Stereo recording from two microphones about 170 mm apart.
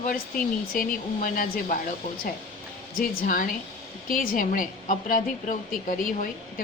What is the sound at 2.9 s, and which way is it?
A woman's voice, 55° left (ahead or behind).